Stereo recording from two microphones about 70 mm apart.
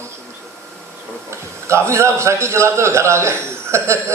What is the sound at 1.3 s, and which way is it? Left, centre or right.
A man's voice, right.